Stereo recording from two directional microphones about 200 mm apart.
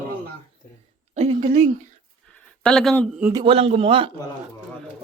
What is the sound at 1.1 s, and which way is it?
Speech, 35° right (ahead or behind).